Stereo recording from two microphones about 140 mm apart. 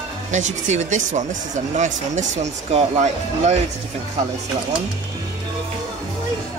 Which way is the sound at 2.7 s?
55° right (ahead or behind).